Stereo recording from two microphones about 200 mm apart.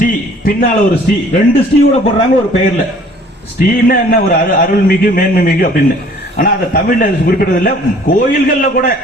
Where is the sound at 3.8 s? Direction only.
45° left (ahead or behind).